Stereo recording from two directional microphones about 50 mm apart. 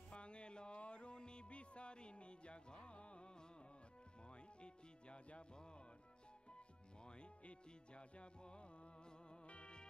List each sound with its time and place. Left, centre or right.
0.1 s music: left
7.1 s music: left